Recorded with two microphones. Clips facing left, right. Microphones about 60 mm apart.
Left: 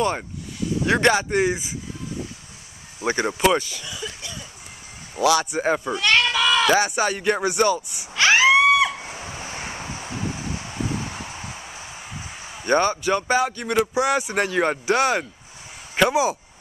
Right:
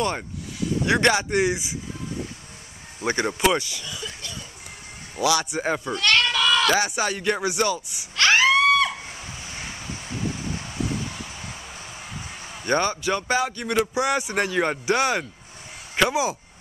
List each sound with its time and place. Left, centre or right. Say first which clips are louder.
0.8 s speech: left 2 dB; centre
1.3 s speech: left 1 dB; left
3.0 s speech: left 1 dB; centre
3.8 s a sound: left 1 dB; centre
5.2 s speech: left 3 dB; left
5.6 s bleat: left 3 dB; centre
6.8 s speech: left 3 dB; left
7.2 s speech: left 2 dB; centre
7.6 s a sound: left 4 dB; centre
9.1 s vehicle: left 4 dB; left
11.1 s a sound: left 3 dB; left
11.5 s a sound: left 1 dB; centre
12.6 s speech: left 3 dB; left
14.3 s speech: left 2 dB; centre